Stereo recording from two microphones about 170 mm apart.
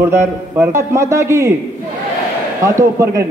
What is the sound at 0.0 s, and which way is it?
A man's voice, 15° right (ahead or behind).